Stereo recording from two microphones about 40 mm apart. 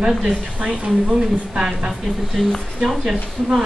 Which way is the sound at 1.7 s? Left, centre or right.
Centre.